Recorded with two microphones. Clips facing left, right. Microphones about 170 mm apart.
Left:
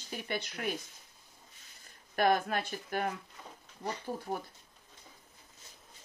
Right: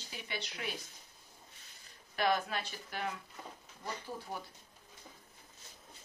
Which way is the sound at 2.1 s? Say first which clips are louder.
Left 4 dB; 50° left (ahead or behind).